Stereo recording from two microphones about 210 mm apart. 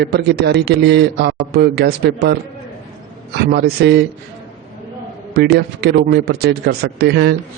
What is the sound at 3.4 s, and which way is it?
Speech, 50° right (ahead or behind).